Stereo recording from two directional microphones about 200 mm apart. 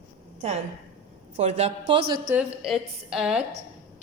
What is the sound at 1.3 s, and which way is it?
Speech, 35° right (ahead or behind).